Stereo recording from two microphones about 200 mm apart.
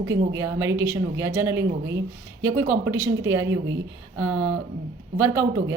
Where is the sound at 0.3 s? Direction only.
15° right (ahead or behind).